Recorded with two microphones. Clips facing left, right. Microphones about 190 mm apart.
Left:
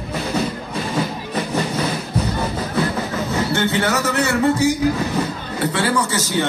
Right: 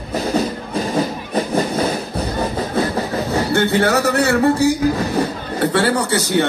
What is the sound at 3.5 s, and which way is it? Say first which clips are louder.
Speech: right 5 dB; 55° right (ahead or behind).